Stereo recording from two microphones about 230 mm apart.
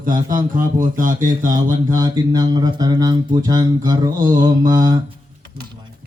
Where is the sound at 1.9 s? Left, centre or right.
Centre.